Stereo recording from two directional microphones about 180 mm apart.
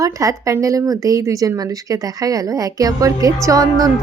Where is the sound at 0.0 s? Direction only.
20° right (ahead or behind).